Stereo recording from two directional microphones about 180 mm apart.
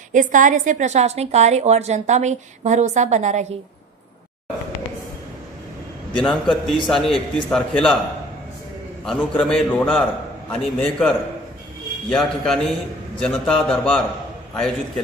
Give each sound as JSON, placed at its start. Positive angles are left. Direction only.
{"t": 0.1, "sound": "a woman's voice", "side_deg": -45}
{"t": 6.2, "sound": "a man's voice", "side_deg": 0}
{"t": 9.0, "sound": "a man's voice", "side_deg": 0}